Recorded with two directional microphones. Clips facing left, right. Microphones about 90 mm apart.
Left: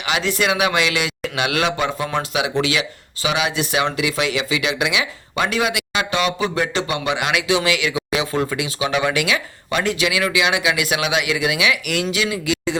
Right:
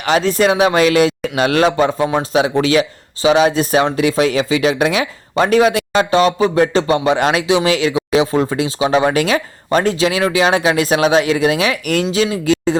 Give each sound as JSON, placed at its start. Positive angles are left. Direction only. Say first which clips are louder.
{"t": 0.0, "sound": "speech", "louder": "right 7 dB", "side_deg": -40}